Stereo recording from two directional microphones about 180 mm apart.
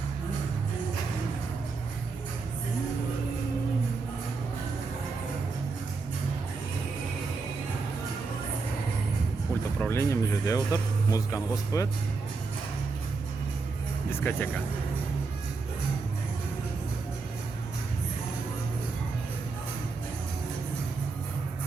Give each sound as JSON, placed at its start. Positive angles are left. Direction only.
{"t": 9.8, "sound": "speech", "side_deg": 15}
{"t": 14.1, "sound": "speech", "side_deg": 10}